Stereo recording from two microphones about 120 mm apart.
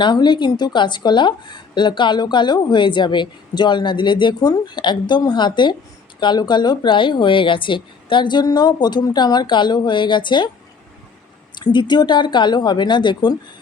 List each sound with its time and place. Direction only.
0.0 s a woman's voice: 40° left (ahead or behind)
11.6 s a woman's voice: 40° left (ahead or behind)